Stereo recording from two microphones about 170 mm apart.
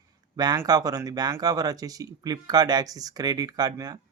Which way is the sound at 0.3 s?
20° right (ahead or behind).